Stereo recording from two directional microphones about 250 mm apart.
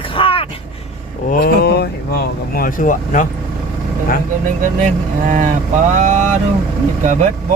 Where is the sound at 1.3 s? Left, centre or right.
Left.